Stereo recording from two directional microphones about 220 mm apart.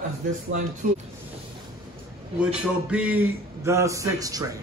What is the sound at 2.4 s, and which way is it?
A man's voice, 5° right (ahead or behind).